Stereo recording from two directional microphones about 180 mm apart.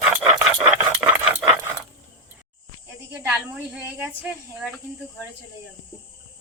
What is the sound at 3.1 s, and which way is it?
Snake, 15° right (ahead or behind).